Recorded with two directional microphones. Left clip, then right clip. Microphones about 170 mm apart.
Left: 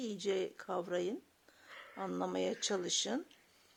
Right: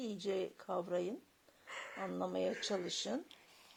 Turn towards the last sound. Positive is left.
turn(degrees=20)  # may be behind; listen again after turning